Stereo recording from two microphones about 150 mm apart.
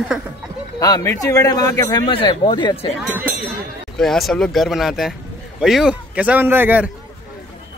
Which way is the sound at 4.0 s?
Centre (ahead or behind).